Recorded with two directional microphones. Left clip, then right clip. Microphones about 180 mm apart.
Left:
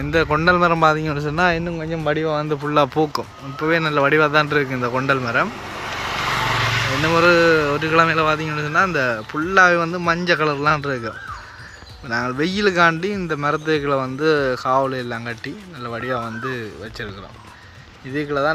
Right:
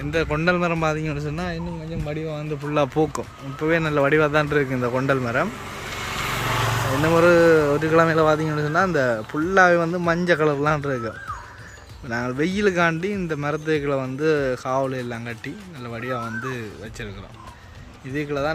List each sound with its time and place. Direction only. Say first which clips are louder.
0.1 s a man's voice: left 5 dB; 10° right (ahead or behind)
2.6 s speech: left 2 dB; 10° right (ahead or behind)
6.6 s vehicle: left 3 dB; 40° right (ahead or behind)
7.0 s a man's voice: left 1 dB; 25° right (ahead or behind)
18.1 s a man's voice: left 5 dB; 10° right (ahead or behind)